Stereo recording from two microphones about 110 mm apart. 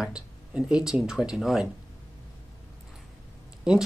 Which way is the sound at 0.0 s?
5° right (ahead or behind).